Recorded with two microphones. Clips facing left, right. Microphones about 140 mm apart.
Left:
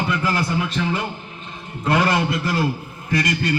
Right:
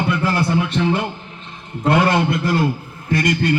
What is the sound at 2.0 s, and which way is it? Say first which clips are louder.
Speech: right 3 dB; 55° right (ahead or behind).